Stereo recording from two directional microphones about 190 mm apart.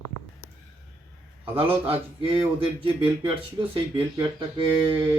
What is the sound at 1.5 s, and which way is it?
Speech, 30° right (ahead or behind).